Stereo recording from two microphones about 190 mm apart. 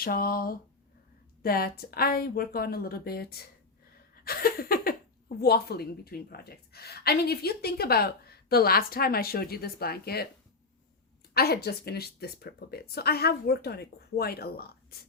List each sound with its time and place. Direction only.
0.0 s a woman's voice: 50° left (ahead or behind)
4.1 s a sound: 50° left (ahead or behind)
5.4 s a woman's voice: 55° left (ahead or behind)
11.3 s a woman's voice: 55° left (ahead or behind)